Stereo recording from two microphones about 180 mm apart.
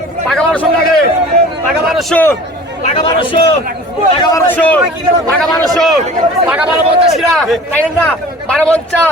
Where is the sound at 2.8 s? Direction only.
35° left (ahead or behind); by 4.8 s 10° left (ahead or behind).